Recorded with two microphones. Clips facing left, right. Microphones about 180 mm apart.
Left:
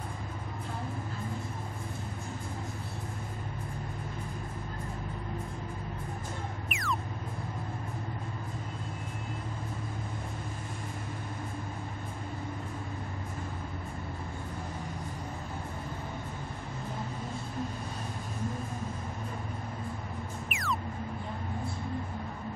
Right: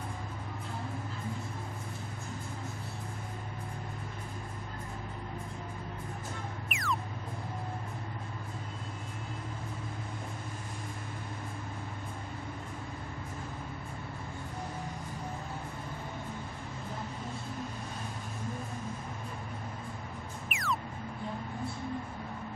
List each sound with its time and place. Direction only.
6.7 s music: centre (ahead or behind)
20.4 s music: centre (ahead or behind)